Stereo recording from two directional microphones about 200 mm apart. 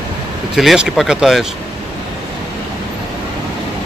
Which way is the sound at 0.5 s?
Centre (ahead or behind).